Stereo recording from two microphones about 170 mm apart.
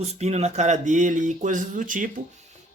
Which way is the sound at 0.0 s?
40° right (ahead or behind).